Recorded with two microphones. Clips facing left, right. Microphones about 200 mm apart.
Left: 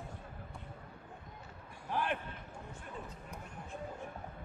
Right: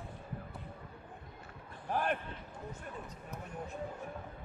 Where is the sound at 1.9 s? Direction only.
45° right (ahead or behind).